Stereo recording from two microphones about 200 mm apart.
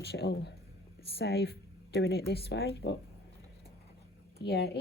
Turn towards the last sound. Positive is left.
turn(degrees=55)  # may be behind; listen again after turning